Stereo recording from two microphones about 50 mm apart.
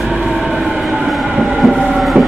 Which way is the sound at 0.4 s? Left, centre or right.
Centre.